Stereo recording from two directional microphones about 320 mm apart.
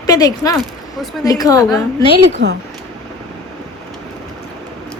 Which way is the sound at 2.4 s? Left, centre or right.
Right.